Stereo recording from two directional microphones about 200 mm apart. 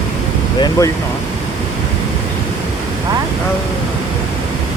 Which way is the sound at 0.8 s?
15° left (ahead or behind).